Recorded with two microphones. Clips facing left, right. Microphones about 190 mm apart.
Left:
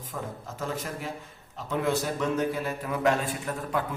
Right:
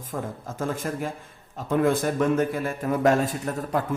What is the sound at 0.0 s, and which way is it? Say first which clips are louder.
A man's voice: right 4 dB; 50° right (ahead or behind).